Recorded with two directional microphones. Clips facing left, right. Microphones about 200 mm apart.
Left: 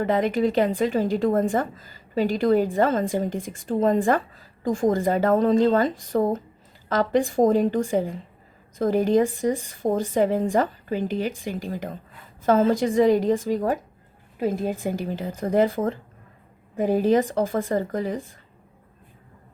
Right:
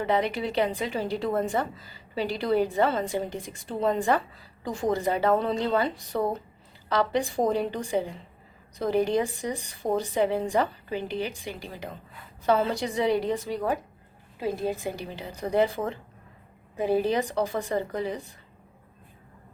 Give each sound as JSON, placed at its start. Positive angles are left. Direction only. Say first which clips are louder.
{"t": 0.0, "sound": "a woman's voice", "louder": "left 5 dB", "side_deg": 45}